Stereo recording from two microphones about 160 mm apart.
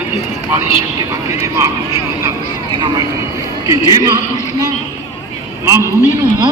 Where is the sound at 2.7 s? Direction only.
30° right (ahead or behind).